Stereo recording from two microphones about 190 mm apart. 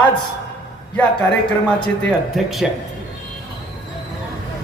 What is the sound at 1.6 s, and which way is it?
A man's voice, 5° left (ahead or behind).